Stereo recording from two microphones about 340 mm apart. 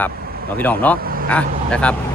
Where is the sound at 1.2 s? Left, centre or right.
Centre.